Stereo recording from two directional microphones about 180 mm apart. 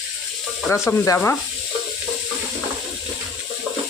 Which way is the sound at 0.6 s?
15° left (ahead or behind).